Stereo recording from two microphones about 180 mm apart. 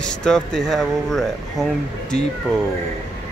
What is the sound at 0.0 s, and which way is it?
Speech, 5° left (ahead or behind).